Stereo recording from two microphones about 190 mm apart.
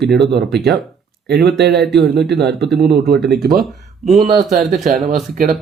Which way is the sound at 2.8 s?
60° right (ahead or behind).